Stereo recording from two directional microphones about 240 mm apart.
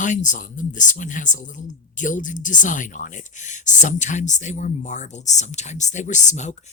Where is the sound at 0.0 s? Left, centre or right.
Left.